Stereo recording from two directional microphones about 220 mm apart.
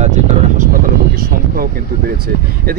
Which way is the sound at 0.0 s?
35° right (ahead or behind).